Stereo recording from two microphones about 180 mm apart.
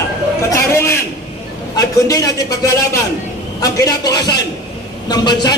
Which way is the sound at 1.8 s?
20° left (ahead or behind).